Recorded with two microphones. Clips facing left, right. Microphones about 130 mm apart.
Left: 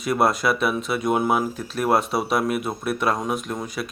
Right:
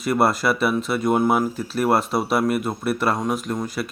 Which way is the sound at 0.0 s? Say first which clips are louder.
Right 1 dB; centre (ahead or behind).